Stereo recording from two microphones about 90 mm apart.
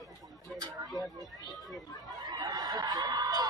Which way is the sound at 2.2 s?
50° right (ahead or behind).